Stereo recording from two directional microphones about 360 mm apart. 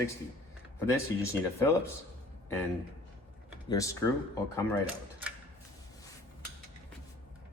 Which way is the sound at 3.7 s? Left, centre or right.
Centre.